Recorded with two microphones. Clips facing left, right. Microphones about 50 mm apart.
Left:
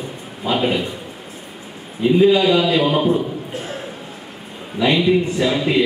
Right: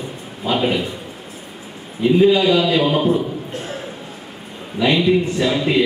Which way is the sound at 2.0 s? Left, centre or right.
Centre.